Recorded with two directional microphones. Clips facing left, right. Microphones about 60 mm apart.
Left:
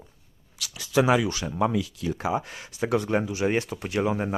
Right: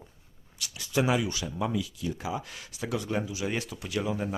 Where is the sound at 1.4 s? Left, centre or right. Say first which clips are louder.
Left 5 dB; left.